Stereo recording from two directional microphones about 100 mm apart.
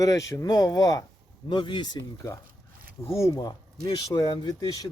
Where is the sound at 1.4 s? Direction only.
55° left (ahead or behind).